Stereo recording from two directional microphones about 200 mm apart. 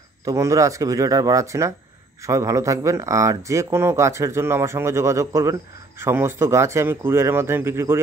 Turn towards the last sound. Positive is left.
turn(degrees=-10)  # may be behind; listen again after turning